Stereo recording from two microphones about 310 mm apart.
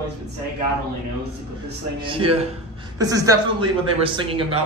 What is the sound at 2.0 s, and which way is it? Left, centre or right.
A woman's voice, centre.